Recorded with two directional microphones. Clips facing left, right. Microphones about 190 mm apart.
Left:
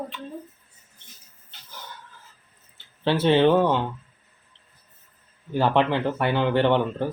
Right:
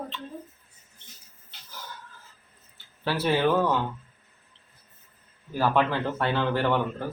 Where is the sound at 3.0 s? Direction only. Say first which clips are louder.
Left 6 dB; 25° left (ahead or behind).